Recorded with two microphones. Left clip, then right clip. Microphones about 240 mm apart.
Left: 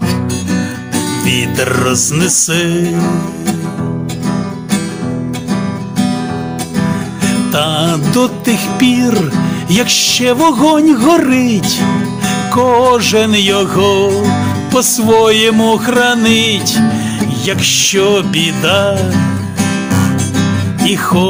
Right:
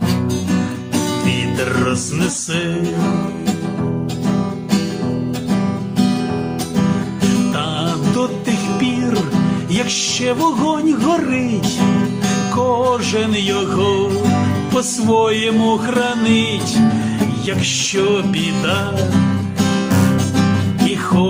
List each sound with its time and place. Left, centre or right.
1.2 s music: left
7.5 s music: left
12.5 s music: left
17.6 s music: left
20.9 s music: left